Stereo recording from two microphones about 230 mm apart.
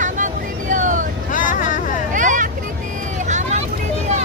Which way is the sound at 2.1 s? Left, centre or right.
Right.